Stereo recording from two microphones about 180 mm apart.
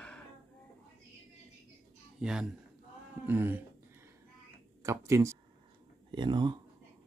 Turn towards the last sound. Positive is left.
turn(degrees=-25)  # may be behind; listen again after turning